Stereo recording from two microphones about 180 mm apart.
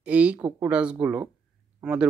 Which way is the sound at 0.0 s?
5° right (ahead or behind).